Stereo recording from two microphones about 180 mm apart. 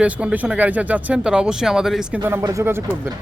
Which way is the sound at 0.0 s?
5° right (ahead or behind).